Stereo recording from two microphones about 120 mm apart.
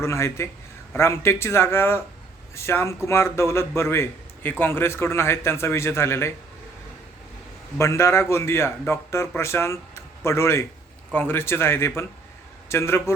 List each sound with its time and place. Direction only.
0.0 s a man's voice: 25° left (ahead or behind)
7.8 s a man's voice: 25° left (ahead or behind)